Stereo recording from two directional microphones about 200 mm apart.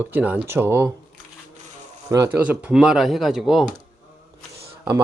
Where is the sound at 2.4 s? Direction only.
5° right (ahead or behind).